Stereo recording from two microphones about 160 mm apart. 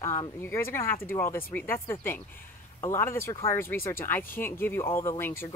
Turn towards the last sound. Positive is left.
turn(degrees=15)  # may be behind; listen again after turning